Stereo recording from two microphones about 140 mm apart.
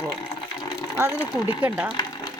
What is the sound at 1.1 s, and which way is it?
Speech, 25° left (ahead or behind).